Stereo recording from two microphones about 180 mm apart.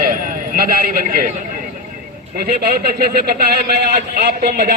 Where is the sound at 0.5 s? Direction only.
55° right (ahead or behind).